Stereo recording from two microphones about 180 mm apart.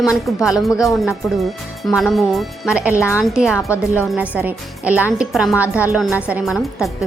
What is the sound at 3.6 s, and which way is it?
Speech, 15° left (ahead or behind).